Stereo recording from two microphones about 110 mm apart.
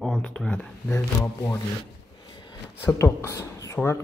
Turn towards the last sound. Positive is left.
turn(degrees=25)  # may be behind; listen again after turning